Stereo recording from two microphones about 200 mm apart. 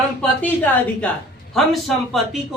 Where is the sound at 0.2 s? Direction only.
10° left (ahead or behind).